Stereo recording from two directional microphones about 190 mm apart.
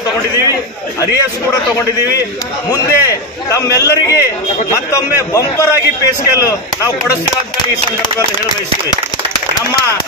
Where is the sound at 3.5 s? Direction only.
15° left (ahead or behind).